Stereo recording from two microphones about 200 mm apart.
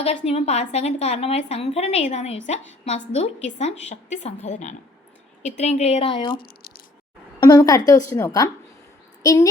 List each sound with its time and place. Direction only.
0.0 s a woman's voice: 30° left (ahead or behind)
6.4 s squish: 50° left (ahead or behind)
7.3 s a woman's voice: 20° left (ahead or behind)